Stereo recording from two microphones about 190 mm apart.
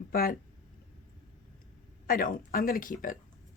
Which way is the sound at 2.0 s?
45° left (ahead or behind).